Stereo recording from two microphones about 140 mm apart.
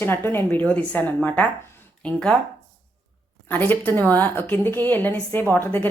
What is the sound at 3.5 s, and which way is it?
Speech, 15° left (ahead or behind).